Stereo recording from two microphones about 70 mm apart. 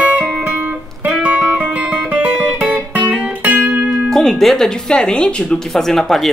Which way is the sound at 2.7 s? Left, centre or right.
Right.